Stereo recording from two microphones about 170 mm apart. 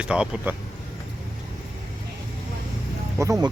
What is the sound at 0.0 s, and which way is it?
Speech, 5° right (ahead or behind).